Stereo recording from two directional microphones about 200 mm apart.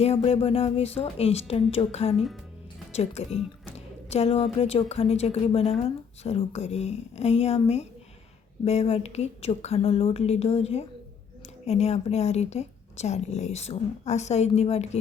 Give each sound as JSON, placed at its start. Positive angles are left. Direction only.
{"t": 0.0, "sound": "speech", "side_deg": 30}
{"t": 2.1, "sound": "speech", "side_deg": 0}
{"t": 2.9, "sound": "speech", "side_deg": 30}